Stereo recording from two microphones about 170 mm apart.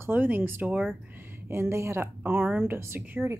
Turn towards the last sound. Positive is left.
turn(degrees=-15)  # may be behind; listen again after turning